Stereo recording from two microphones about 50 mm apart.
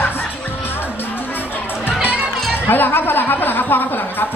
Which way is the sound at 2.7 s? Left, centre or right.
Left.